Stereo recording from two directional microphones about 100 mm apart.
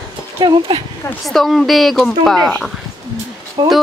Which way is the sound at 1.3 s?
Centre (ahead or behind).